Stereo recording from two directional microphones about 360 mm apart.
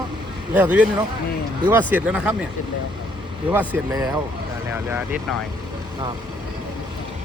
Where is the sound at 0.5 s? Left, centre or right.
Centre.